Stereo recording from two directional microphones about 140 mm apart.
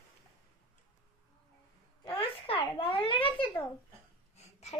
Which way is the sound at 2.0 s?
40° left (ahead or behind).